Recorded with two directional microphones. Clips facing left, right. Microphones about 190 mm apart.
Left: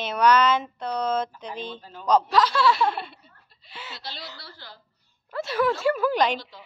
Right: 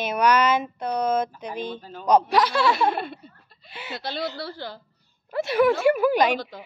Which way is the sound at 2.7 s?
50° right (ahead or behind).